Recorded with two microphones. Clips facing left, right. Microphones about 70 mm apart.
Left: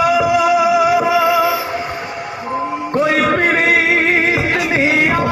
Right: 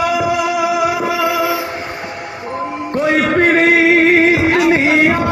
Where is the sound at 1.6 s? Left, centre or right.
Centre.